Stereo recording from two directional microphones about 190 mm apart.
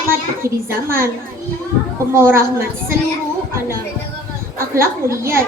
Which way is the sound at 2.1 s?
15° right (ahead or behind).